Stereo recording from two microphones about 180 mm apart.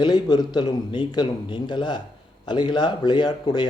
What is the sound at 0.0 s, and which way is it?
A man's voice, 25° left (ahead or behind).